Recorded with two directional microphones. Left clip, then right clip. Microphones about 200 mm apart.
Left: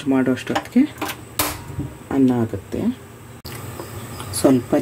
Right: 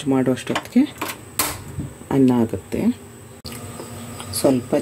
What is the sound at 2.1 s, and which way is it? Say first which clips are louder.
Speech: right 1 dB; 20° right (ahead or behind).